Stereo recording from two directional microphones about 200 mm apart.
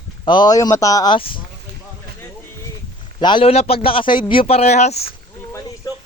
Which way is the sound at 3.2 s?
25° left (ahead or behind).